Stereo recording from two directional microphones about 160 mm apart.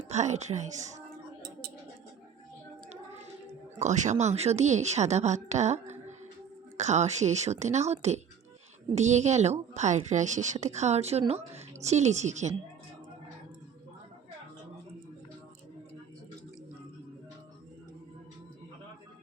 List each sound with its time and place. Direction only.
0.1 s a woman's voice: 45° right (ahead or behind)
3.8 s a woman's voice: 50° right (ahead or behind)